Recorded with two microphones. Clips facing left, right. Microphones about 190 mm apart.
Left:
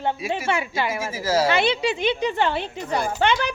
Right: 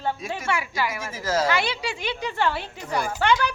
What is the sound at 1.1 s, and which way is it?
Speech, 10° left (ahead or behind).